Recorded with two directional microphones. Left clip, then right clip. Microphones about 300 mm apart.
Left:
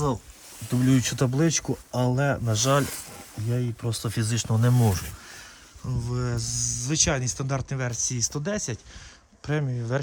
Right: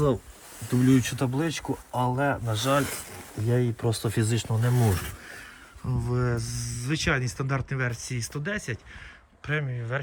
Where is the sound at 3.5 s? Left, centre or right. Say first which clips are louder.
Right 5 dB; centre.